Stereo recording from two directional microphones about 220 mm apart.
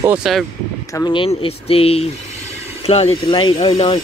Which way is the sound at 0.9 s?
20° left (ahead or behind).